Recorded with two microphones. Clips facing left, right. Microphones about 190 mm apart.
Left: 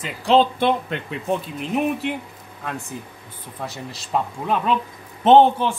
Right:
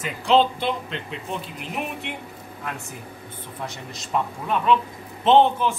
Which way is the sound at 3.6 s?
35° left (ahead or behind).